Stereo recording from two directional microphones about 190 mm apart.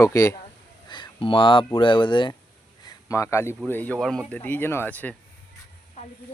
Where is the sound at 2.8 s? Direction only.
15° left (ahead or behind).